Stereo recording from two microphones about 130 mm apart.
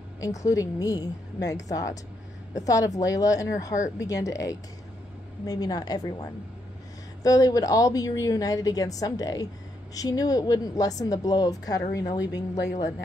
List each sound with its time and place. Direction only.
0.2 s a woman's voice: 25° left (ahead or behind)